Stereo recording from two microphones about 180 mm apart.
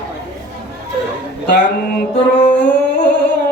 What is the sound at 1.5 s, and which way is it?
Music, 70° left (ahead or behind).